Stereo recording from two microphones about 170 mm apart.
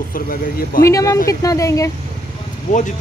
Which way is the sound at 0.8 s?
20° left (ahead or behind).